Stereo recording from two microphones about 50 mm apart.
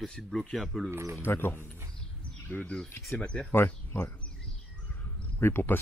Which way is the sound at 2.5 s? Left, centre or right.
Left.